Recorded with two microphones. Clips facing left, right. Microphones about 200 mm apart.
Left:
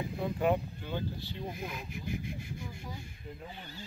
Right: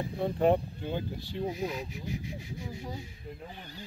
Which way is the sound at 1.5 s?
55° left (ahead or behind).